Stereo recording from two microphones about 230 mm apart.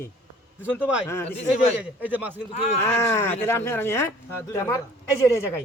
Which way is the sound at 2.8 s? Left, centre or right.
Centre.